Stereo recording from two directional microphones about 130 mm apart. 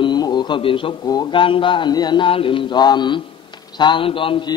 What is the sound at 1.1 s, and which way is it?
A man's voice, 40° left (ahead or behind).